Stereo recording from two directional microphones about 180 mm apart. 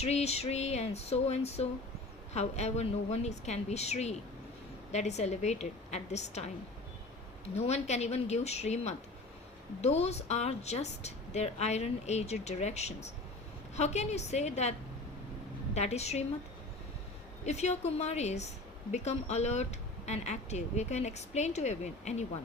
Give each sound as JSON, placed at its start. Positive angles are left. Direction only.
{"t": 0.0, "sound": "a woman's voice", "side_deg": 35}
{"t": 7.5, "sound": "a woman's voice", "side_deg": 40}
{"t": 17.4, "sound": "a woman's voice", "side_deg": 40}